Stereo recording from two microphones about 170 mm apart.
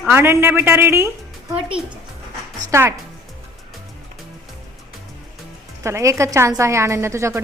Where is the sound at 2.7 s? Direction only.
20° right (ahead or behind).